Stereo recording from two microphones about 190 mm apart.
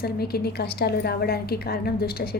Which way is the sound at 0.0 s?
55° left (ahead or behind).